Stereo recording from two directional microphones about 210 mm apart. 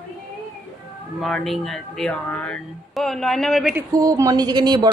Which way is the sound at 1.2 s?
Centre (ahead or behind).